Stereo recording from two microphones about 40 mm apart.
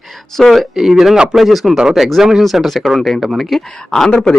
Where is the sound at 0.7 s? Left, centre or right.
Centre.